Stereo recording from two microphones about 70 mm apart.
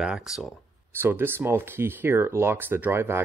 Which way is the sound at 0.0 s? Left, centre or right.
Centre.